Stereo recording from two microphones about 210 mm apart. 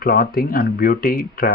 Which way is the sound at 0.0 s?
45° left (ahead or behind).